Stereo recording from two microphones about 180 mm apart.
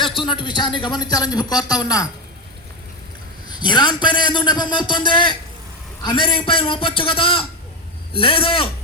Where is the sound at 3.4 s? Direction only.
25° left (ahead or behind).